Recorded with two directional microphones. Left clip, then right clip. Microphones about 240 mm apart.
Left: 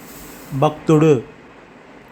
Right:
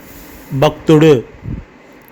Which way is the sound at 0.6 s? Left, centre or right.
Centre.